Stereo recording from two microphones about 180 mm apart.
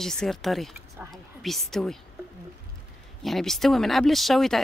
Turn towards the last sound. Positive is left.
turn(degrees=0)  # may be behind; listen again after turning